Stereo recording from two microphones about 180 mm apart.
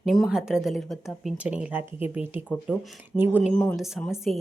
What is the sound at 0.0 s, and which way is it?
Speech, centre (ahead or behind).